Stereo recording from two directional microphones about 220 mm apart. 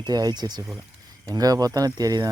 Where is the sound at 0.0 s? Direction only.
20° right (ahead or behind).